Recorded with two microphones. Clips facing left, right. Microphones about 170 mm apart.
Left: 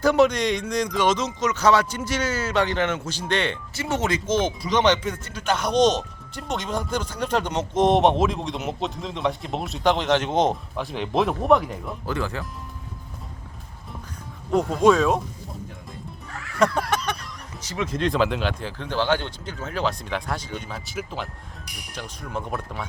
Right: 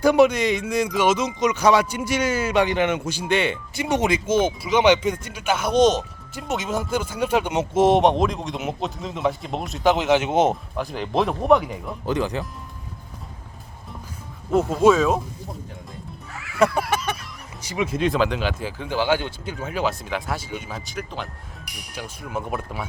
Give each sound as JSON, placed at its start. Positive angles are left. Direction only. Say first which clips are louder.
{"t": 0.0, "sound": "speech", "louder": "right 2 dB", "side_deg": -10}
{"t": 12.0, "sound": "speech", "louder": "right 5 dB", "side_deg": -20}
{"t": 14.5, "sound": "speech", "louder": "right 1 dB", "side_deg": -5}
{"t": 16.4, "sound": "speech", "louder": "right 2 dB", "side_deg": -10}
{"t": 21.9, "sound": "speech", "louder": "right 2 dB", "side_deg": -5}